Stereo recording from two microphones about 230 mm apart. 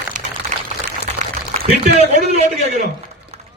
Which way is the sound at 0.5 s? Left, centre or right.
Right.